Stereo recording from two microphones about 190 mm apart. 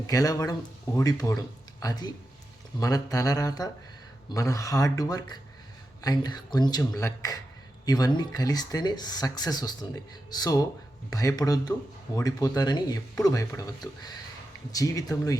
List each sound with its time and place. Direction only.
0.1 s speech: 20° left (ahead or behind)